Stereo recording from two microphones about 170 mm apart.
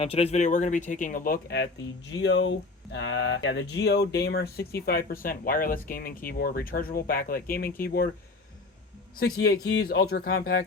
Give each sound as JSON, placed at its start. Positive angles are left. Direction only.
{"t": 0.0, "sound": "speech", "side_deg": 35}
{"t": 2.2, "sound": "a sound", "side_deg": 90}
{"t": 4.9, "sound": "speech", "side_deg": 60}
{"t": 9.1, "sound": "speech", "side_deg": 60}
{"t": 9.6, "sound": "speech", "side_deg": 75}